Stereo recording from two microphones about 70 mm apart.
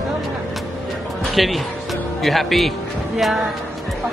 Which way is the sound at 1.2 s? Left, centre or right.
Centre.